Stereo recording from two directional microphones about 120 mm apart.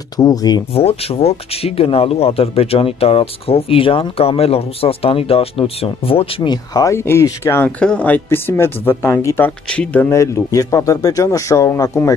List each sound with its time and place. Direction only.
0.2 s speech: 30° left (ahead or behind)
0.7 s speech: 55° left (ahead or behind)
6.5 s speech: 30° left (ahead or behind)
7.6 s speech: 10° left (ahead or behind)
9.7 s speech: 10° left (ahead or behind)
10.0 s speech: 25° left (ahead or behind)